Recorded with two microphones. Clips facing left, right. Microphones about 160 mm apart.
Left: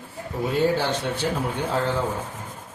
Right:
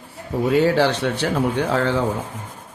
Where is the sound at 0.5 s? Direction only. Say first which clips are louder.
Right 5 dB; 75° right (ahead or behind).